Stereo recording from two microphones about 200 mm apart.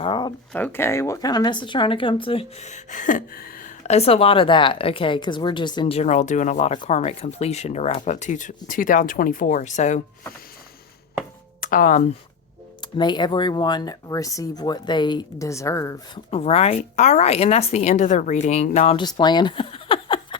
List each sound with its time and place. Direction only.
0.0 s speech: 25° left (ahead or behind)
0.5 s speech: 10° left (ahead or behind); by 3.7 s 45° left (ahead or behind)
3.8 s a woman's voice: 30° left (ahead or behind)
11.6 s speech: 45° left (ahead or behind)
13.0 s speech: 20° left (ahead or behind)
16.3 s a woman's voice: 30° left (ahead or behind)
19.0 s a sound: 20° left (ahead or behind)